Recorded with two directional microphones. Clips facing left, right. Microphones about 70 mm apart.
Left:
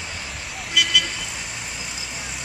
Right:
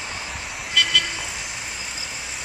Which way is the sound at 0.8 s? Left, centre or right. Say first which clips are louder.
Even; centre.